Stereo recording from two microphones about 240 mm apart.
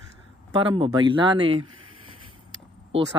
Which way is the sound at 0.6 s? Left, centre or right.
Right.